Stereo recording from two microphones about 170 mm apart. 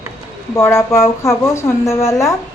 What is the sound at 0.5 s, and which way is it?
A woman's voice, 15° left (ahead or behind).